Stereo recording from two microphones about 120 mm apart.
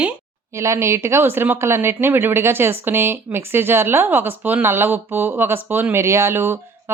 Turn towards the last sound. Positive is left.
turn(degrees=-20)  # may be behind; listen again after turning